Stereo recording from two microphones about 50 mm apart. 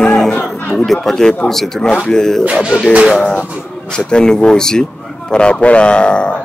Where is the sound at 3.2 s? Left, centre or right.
Left.